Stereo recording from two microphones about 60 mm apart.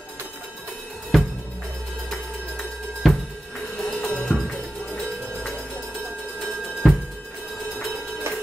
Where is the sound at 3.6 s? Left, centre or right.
Centre.